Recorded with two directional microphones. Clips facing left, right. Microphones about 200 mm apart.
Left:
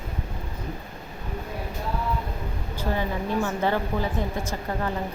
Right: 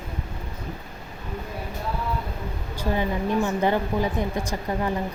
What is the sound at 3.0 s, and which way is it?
A woman's voice, 15° right (ahead or behind).